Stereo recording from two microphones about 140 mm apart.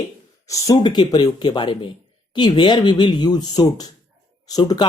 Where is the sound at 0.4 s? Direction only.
25° left (ahead or behind).